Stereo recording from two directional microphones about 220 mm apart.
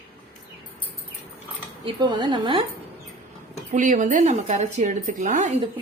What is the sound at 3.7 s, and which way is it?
A woman's voice, 35° right (ahead or behind).